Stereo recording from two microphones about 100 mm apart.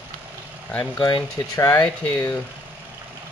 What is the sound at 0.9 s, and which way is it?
Speech, 45° left (ahead or behind).